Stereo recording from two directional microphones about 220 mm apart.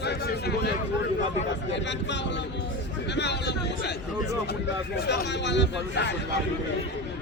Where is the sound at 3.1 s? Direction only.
50° left (ahead or behind).